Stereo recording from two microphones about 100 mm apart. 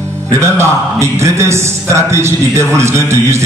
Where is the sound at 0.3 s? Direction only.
30° right (ahead or behind).